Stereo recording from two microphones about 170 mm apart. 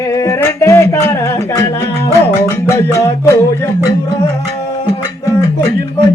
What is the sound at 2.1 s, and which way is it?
Music, 15° left (ahead or behind).